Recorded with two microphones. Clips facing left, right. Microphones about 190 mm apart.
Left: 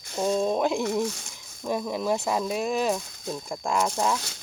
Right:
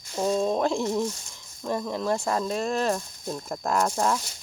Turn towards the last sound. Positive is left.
turn(degrees=0)  # may be behind; listen again after turning